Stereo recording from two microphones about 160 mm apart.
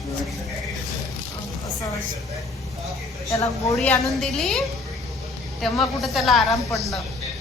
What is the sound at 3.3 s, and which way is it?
Speech, 20° left (ahead or behind).